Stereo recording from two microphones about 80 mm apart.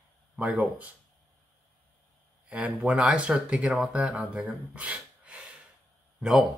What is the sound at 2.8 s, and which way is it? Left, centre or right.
Speech, centre.